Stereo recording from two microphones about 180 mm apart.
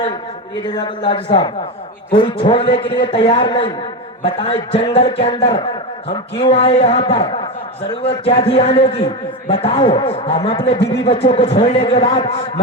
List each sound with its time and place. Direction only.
0.6 s a man's voice: 25° left (ahead or behind)